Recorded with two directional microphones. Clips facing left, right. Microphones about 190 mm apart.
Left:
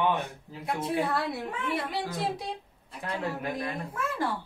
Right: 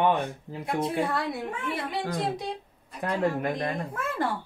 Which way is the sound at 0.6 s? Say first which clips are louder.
Right 2 dB; centre (ahead or behind).